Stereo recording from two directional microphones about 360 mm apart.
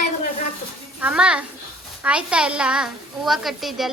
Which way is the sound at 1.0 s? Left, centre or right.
Centre.